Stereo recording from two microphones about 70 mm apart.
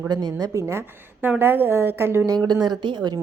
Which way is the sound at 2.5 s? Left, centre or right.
Right.